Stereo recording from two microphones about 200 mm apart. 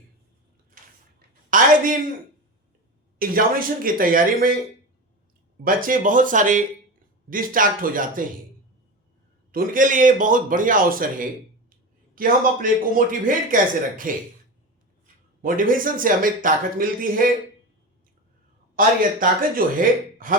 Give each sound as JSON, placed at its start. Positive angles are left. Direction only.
{"t": 0.8, "sound": "a sound", "side_deg": -45}
{"t": 3.2, "sound": "speech", "side_deg": -45}
{"t": 5.6, "sound": "speech", "side_deg": -45}
{"t": 9.5, "sound": "speech", "side_deg": -45}
{"t": 18.8, "sound": "speech", "side_deg": -45}